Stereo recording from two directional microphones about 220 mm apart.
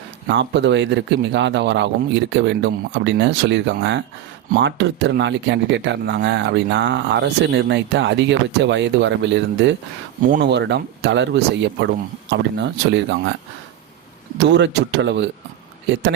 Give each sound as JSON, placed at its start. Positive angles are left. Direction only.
{"t": 0.3, "sound": "speech", "side_deg": -55}
{"t": 14.4, "sound": "speech", "side_deg": -50}